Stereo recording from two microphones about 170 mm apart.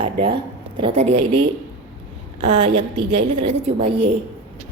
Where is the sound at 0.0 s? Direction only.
30° right (ahead or behind).